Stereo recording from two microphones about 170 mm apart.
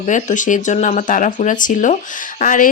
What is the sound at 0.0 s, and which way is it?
Speech, 45° left (ahead or behind).